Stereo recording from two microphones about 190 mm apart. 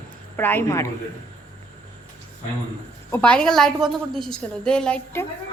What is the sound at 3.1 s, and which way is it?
Speech, 5° left (ahead or behind).